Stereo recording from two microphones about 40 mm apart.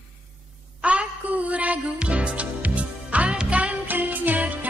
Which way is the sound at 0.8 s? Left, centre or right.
Right.